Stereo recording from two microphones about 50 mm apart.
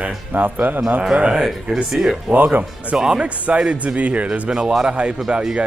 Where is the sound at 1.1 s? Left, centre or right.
Right.